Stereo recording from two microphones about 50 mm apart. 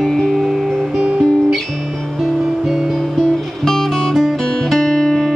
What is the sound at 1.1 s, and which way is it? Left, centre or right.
Music, centre.